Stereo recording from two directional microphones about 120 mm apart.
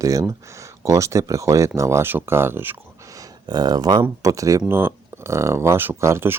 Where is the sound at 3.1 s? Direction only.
30° right (ahead or behind).